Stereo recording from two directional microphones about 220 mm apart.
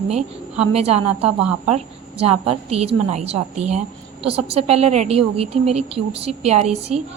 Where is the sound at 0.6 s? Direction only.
30° right (ahead or behind).